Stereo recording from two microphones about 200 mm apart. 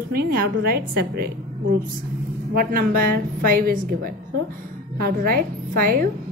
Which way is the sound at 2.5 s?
45° right (ahead or behind).